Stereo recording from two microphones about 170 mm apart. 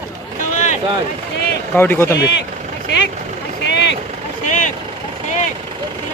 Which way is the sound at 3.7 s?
90° left.